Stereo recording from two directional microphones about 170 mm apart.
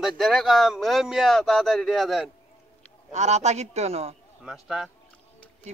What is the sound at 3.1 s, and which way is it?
A man's voice, 40° right (ahead or behind).